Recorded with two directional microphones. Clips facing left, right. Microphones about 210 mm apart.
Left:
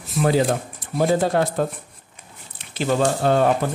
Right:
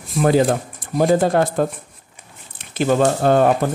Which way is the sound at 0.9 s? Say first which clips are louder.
Right 3 dB; 50° right (ahead or behind).